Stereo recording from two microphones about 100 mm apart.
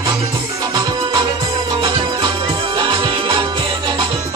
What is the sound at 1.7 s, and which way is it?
Music, 50° right (ahead or behind).